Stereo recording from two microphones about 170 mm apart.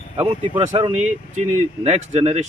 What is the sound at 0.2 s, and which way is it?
Speech, 35° right (ahead or behind).